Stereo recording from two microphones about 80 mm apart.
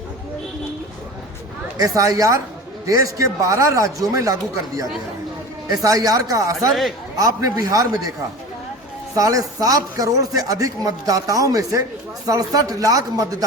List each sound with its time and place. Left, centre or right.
1.8 s a man's voice: right
9.1 s a man's voice: right